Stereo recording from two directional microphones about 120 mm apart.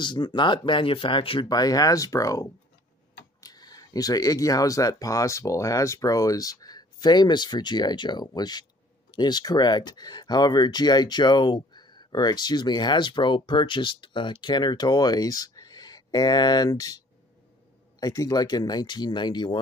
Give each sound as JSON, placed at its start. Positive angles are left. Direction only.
{"t": 0.0, "sound": "speech", "side_deg": 40}
{"t": 1.5, "sound": "speech", "side_deg": 30}
{"t": 18.0, "sound": "speech", "side_deg": 30}